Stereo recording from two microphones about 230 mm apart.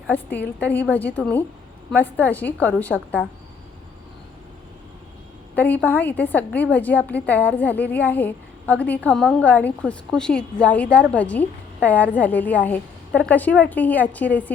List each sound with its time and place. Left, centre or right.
0.1 s a woman's voice: centre
5.5 s a woman's voice: centre